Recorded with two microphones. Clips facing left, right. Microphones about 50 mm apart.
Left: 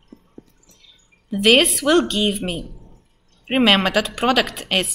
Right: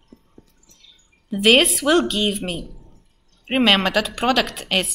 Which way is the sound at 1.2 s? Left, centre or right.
Centre.